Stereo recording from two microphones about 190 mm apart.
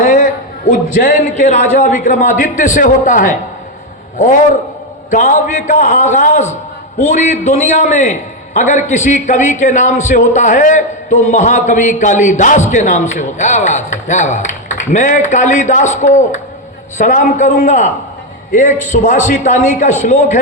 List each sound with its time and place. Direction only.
0.0 s a sound: 45° left (ahead or behind)
0.7 s a man's voice: 45° left (ahead or behind)
5.1 s a man's voice: 45° left (ahead or behind)